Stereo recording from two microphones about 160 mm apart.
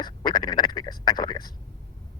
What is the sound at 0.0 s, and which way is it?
Quack, 25° left (ahead or behind).